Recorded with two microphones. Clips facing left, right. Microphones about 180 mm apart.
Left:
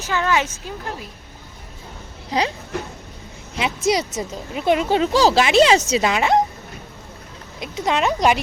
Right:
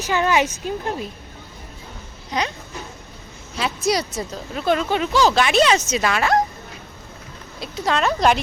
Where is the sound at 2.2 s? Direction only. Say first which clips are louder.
Left 3 dB; 30° left (ahead or behind).